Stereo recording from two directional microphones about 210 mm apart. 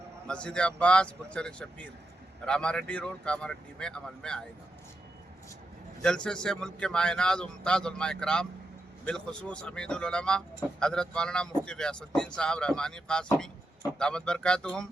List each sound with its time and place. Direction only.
0.3 s speech: 5° left (ahead or behind)
6.0 s speech: 5° left (ahead or behind)